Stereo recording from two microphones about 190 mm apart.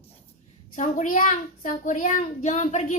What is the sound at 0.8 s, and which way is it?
A child's voice, 40° left (ahead or behind).